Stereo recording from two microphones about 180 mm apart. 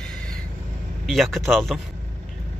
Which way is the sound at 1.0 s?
Centre (ahead or behind).